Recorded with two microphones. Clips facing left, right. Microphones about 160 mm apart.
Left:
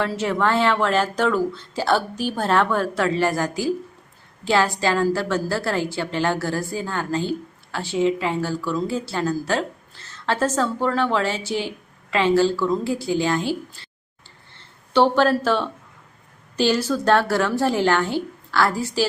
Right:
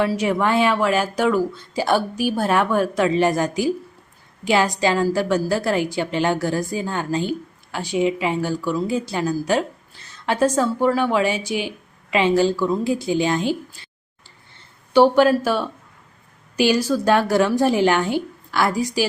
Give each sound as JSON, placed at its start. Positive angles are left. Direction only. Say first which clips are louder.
{"t": 0.0, "sound": "a woman's voice", "louder": "right 2 dB", "side_deg": -15}
{"t": 14.9, "sound": "a woman's voice", "louder": "right 3 dB", "side_deg": -10}